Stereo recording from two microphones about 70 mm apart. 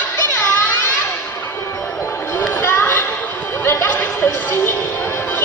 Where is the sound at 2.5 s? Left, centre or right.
Left.